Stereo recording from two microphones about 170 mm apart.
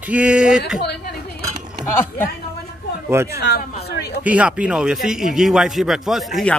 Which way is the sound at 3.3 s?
70° left (ahead or behind).